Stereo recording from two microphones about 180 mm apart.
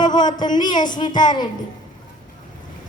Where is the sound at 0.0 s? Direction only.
25° left (ahead or behind).